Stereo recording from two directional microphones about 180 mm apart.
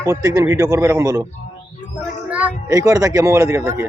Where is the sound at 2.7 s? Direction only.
20° right (ahead or behind).